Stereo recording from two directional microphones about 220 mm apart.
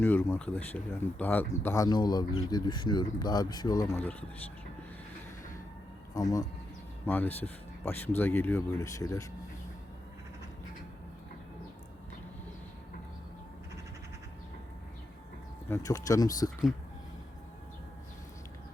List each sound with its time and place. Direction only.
0.0 s speech: 10° left (ahead or behind)
6.1 s speech: 15° left (ahead or behind)
15.7 s speech: 15° left (ahead or behind)